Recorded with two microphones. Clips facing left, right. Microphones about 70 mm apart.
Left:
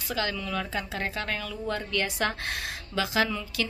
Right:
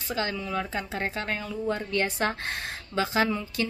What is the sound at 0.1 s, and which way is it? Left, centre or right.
A woman's voice, right.